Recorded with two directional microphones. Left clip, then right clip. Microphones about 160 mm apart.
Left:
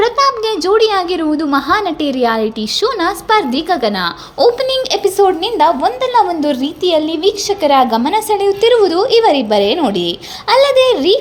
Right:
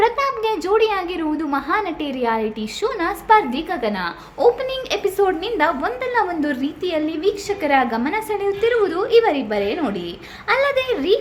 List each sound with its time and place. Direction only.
0.0 s a woman's voice: 30° left (ahead or behind)
5.0 s a woman's voice: 25° left (ahead or behind)